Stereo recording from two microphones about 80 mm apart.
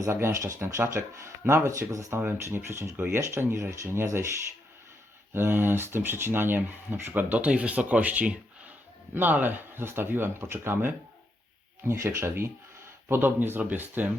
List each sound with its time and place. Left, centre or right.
0.0 s speech: right
2.2 s speech: right
5.3 s speech: right